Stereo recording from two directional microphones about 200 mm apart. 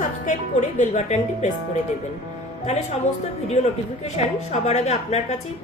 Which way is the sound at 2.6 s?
35° left (ahead or behind).